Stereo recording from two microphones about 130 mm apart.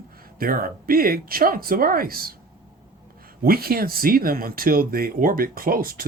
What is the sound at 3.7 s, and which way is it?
Speech, 90° right.